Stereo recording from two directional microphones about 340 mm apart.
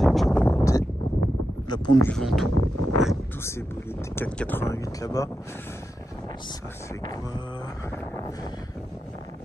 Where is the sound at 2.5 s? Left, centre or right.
Right.